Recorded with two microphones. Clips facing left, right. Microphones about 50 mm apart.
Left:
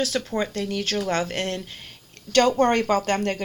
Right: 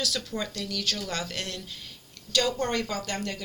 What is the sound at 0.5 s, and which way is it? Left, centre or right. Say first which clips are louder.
Speech: left 6 dB; left.